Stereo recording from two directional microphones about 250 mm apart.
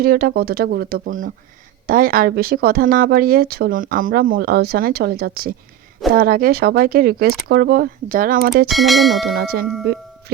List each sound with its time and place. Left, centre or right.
0.0 s speech: right
8.6 s speech: centre
9.3 s speech: right
9.8 s music: right